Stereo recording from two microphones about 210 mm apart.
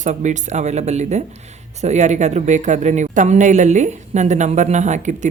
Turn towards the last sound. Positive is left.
turn(degrees=-35)  # may be behind; listen again after turning